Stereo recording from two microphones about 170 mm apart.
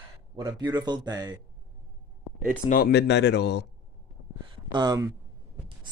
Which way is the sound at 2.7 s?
65° left (ahead or behind).